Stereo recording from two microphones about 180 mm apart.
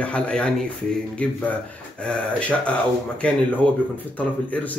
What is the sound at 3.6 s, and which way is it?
Speech, 5° left (ahead or behind).